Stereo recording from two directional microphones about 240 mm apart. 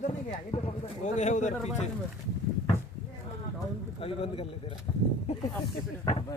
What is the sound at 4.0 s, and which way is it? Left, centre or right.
Speech, left.